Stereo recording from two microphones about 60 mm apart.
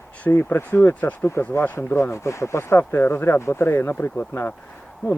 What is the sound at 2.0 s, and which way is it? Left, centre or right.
Speech, left.